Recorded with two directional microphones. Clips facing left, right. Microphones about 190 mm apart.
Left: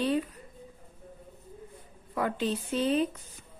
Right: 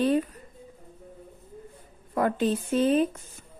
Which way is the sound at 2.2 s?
50° right (ahead or behind).